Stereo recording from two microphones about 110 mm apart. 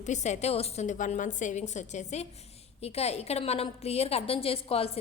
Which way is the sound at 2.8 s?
70° left (ahead or behind).